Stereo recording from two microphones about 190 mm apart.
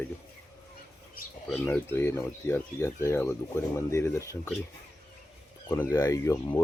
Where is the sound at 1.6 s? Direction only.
10° left (ahead or behind).